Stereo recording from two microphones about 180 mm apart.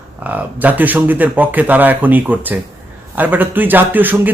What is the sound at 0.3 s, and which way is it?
A man's voice, 10° right (ahead or behind).